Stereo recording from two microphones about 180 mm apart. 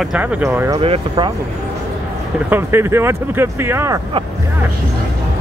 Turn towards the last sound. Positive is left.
turn(degrees=-15)  # may be behind; listen again after turning